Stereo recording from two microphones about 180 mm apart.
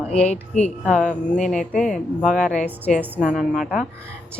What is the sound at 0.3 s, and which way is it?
Speech, 40° left (ahead or behind).